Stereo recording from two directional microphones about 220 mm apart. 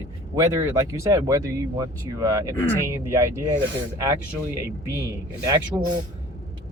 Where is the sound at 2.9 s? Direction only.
10° right (ahead or behind).